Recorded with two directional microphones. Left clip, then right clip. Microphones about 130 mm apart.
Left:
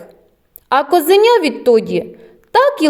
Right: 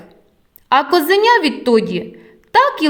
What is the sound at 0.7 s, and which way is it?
A woman's voice, 35° left (ahead or behind).